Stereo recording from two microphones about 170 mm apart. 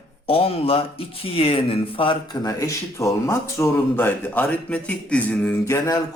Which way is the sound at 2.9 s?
15° left (ahead or behind).